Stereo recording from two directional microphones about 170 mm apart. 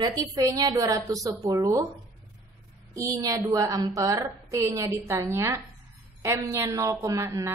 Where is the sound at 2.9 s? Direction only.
20° right (ahead or behind).